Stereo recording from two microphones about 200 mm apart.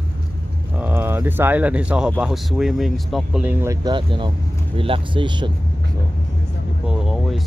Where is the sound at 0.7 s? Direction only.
10° right (ahead or behind).